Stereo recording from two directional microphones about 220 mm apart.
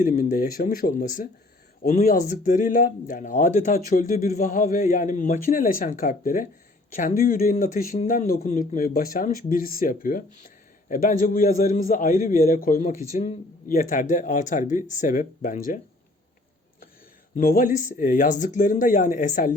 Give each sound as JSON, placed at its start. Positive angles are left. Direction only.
{"t": 0.0, "sound": "speech", "side_deg": 35}
{"t": 17.3, "sound": "speech", "side_deg": 40}